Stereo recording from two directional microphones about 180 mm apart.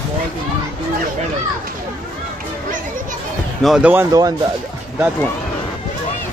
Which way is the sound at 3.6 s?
5° right (ahead or behind).